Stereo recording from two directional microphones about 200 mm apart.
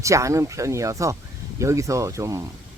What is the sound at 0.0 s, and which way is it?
Speech, 15° right (ahead or behind).